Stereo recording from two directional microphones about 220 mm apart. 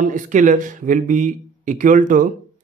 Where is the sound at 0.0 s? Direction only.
35° right (ahead or behind).